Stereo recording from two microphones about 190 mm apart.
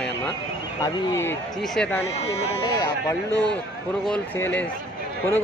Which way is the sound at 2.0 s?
35° left (ahead or behind).